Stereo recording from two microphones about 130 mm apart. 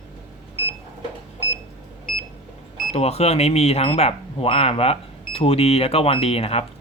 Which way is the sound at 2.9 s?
55° left (ahead or behind).